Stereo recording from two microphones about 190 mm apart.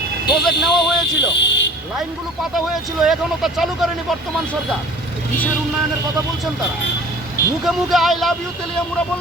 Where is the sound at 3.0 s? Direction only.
Centre (ahead or behind).